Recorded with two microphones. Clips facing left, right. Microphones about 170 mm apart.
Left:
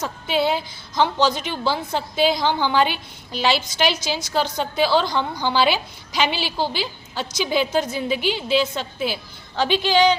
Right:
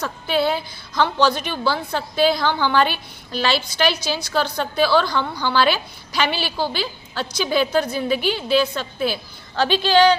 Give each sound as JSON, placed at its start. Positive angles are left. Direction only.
{"t": 0.0, "sound": "a woman's voice", "side_deg": 20}